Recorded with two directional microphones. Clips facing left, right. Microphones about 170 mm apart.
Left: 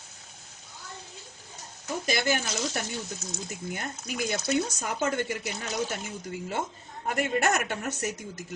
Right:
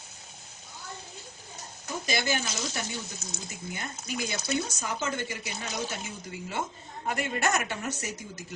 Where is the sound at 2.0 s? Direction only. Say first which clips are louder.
Left 2 dB; 50° left (ahead or behind).